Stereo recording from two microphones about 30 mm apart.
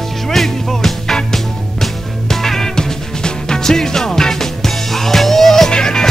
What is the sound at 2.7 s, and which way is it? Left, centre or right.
Music, left.